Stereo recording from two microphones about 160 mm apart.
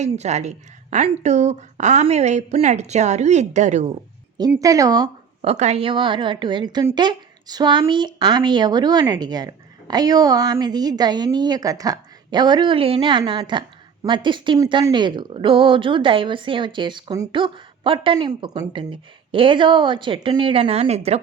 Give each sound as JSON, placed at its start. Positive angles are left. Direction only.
{"t": 0.0, "sound": "a woman's voice", "side_deg": -45}
{"t": 4.6, "sound": "speech", "side_deg": -20}
{"t": 5.5, "sound": "a woman's voice", "side_deg": -40}